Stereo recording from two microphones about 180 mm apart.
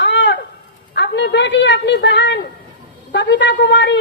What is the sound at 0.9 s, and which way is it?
A woman's voice, 75° left (ahead or behind).